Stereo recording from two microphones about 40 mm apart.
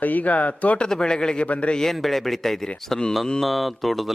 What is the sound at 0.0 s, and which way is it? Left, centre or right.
Speech, left.